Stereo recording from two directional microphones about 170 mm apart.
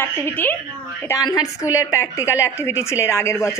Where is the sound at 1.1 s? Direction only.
20° left (ahead or behind).